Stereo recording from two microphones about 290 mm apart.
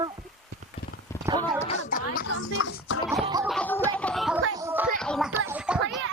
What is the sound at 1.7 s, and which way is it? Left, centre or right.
Speech, left.